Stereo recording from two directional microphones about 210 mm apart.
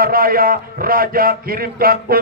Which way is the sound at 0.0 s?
45° right (ahead or behind).